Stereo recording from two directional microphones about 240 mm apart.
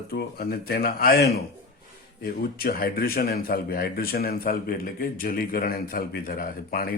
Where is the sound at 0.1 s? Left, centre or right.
Left.